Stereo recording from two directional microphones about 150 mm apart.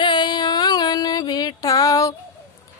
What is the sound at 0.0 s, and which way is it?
Music, 30° left (ahead or behind).